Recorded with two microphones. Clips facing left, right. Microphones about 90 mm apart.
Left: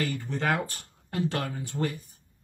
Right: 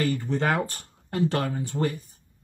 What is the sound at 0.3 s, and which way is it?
Speech, 35° right (ahead or behind).